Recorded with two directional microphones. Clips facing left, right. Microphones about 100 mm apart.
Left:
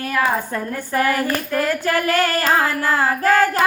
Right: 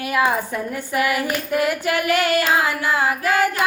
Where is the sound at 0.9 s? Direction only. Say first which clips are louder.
Left 2 dB; 40° left (ahead or behind).